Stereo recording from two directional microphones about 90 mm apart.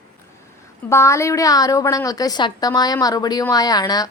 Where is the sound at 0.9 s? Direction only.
30° left (ahead or behind).